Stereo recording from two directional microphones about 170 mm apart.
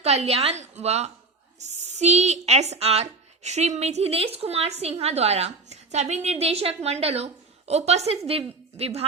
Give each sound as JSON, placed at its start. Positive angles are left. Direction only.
{"t": 0.0, "sound": "a woman's voice", "side_deg": -40}